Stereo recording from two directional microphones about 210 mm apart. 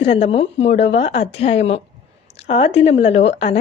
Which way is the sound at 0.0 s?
30° left (ahead or behind).